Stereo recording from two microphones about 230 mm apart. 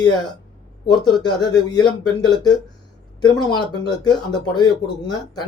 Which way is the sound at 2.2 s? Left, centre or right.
Centre.